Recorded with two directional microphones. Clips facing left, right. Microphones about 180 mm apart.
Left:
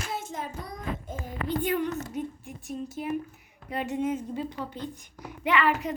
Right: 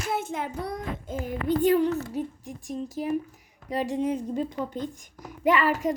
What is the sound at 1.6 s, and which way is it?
Speech, 35° right (ahead or behind).